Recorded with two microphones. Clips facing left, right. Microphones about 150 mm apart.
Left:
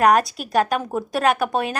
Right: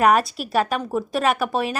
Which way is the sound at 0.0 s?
Centre (ahead or behind).